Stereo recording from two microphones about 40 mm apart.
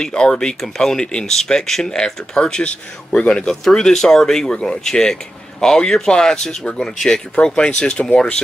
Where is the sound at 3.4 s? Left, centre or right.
Centre.